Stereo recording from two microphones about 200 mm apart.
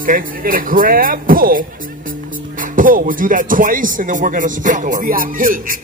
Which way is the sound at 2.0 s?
45° right (ahead or behind).